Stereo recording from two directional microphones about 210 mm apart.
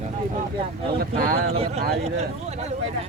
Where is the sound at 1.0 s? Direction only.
45° right (ahead or behind).